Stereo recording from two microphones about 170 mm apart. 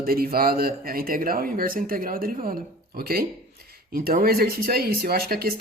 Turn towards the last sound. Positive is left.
turn(degrees=-65)  # may be behind; listen again after turning